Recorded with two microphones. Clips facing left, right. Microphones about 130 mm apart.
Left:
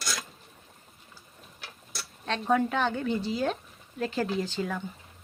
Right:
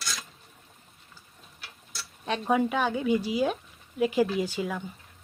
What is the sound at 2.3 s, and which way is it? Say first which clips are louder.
Speech: right 1 dB; 10° right (ahead or behind).